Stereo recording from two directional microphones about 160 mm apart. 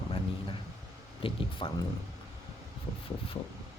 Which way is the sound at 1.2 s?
30° left (ahead or behind).